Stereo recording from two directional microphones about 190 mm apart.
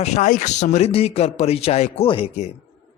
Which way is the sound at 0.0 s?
35° left (ahead or behind).